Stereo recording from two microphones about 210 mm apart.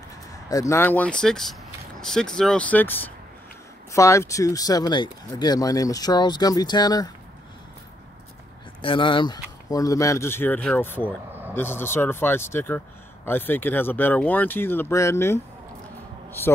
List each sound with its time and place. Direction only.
0.5 s speech: 15° left (ahead or behind)
8.8 s speech: 25° left (ahead or behind)
11.1 s vehicle: 10° right (ahead or behind)
11.5 s speech: 10° left (ahead or behind)